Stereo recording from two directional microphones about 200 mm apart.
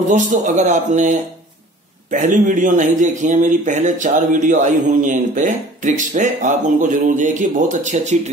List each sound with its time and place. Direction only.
0.1 s speech: 40° right (ahead or behind)